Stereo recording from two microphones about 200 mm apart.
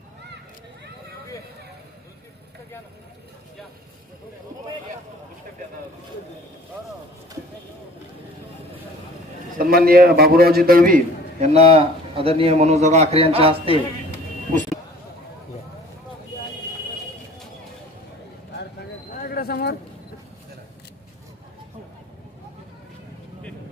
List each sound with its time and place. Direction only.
9.6 s a man's voice: 45° right (ahead or behind); by 13.7 s 30° right (ahead or behind)
19.2 s bird: 50° left (ahead or behind)